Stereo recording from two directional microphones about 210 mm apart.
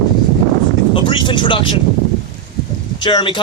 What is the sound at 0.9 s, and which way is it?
Speech, 25° left (ahead or behind).